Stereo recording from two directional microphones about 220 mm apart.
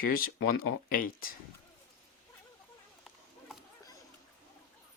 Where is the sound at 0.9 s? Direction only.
40° left (ahead or behind).